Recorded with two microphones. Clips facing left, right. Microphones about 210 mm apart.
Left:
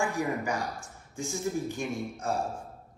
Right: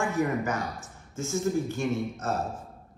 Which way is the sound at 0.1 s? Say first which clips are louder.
Right 3 dB; 15° left (ahead or behind).